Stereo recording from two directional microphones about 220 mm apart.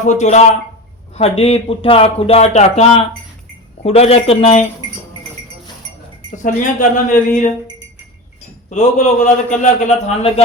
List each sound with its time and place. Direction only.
0.0 s a man's voice: 30° left (ahead or behind)
6.3 s a man's voice: 35° left (ahead or behind)
8.7 s a man's voice: 30° left (ahead or behind)